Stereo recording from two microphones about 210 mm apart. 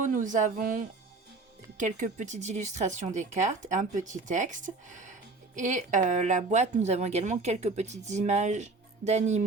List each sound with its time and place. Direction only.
0.0 s speech: 35° right (ahead or behind)